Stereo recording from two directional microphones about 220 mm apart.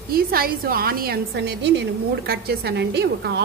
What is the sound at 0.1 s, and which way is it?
Speech, 45° right (ahead or behind).